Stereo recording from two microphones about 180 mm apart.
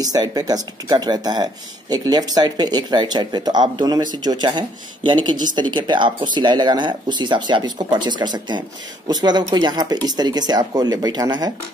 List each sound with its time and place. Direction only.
0.0 s speech: 20° right (ahead or behind)